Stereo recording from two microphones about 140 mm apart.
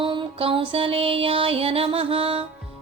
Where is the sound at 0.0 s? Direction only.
35° right (ahead or behind).